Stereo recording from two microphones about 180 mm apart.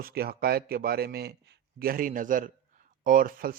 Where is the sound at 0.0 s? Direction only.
60° right (ahead or behind).